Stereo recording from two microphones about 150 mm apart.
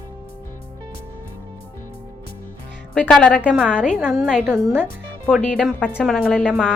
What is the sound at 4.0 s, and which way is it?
A woman's voice, 5° right (ahead or behind).